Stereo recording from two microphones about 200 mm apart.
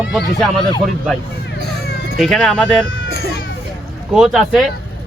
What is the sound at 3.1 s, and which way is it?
Children playing, 55° right (ahead or behind).